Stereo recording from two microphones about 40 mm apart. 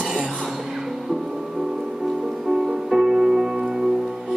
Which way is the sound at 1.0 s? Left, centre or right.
Centre.